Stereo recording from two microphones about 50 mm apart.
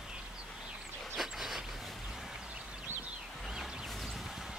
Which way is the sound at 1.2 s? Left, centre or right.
Centre.